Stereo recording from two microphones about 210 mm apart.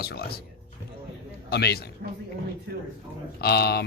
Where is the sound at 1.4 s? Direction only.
50° left (ahead or behind).